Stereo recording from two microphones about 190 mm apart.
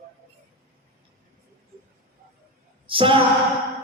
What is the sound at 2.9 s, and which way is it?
Speech, 25° right (ahead or behind).